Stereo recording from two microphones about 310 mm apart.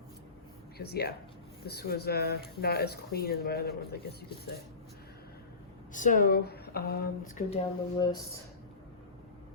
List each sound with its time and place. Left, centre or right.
0.8 s speech: left
5.9 s speech: left
7.5 s speech: centre